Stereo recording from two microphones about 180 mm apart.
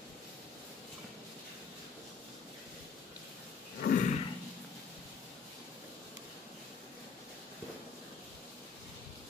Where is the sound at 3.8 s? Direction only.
50° left (ahead or behind).